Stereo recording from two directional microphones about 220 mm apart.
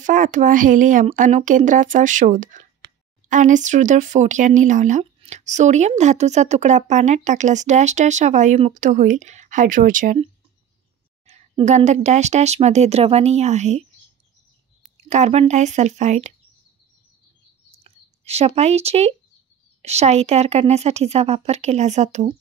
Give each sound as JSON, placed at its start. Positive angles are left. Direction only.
{"t": 0.0, "sound": "speech", "side_deg": -35}
{"t": 11.2, "sound": "speech", "side_deg": -30}
{"t": 15.0, "sound": "speech", "side_deg": -30}
{"t": 17.8, "sound": "a woman's voice", "side_deg": -30}